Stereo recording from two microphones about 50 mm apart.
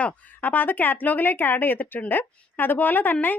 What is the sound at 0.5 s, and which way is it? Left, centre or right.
Speech, left.